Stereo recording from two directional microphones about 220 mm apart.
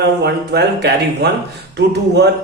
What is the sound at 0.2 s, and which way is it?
A man's voice, 50° right (ahead or behind).